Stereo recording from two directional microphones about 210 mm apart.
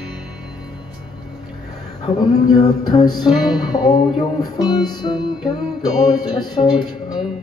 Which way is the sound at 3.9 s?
20° left (ahead or behind).